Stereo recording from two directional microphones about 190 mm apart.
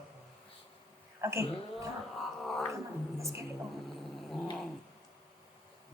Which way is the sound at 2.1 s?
Centre (ahead or behind).